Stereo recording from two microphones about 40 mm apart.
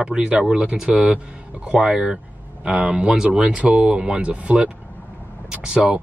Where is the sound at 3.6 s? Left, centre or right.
Right.